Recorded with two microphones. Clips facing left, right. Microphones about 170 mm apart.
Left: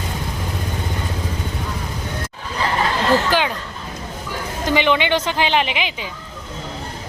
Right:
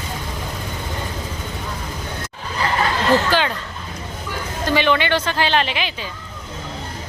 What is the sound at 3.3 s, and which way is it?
Speech, 15° left (ahead or behind).